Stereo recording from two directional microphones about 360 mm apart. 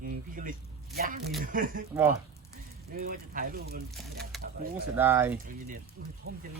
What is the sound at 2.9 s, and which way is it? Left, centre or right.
Speech, right.